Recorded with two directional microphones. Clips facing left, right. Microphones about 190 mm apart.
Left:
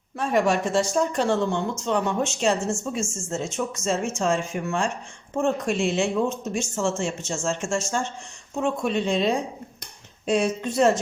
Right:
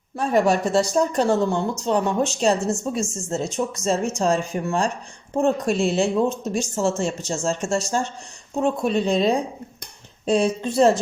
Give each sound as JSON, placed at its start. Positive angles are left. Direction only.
{"t": 0.2, "sound": "speech", "side_deg": -35}